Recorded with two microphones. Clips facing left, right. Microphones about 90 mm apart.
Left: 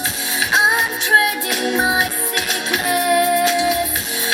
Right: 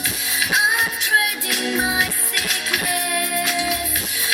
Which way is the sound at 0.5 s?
30° left (ahead or behind).